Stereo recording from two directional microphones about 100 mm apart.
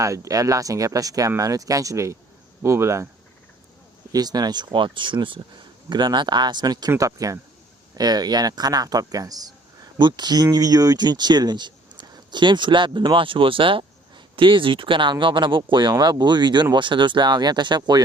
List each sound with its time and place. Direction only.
0.0 s speech: 30° right (ahead or behind)
4.1 s speech: 40° right (ahead or behind)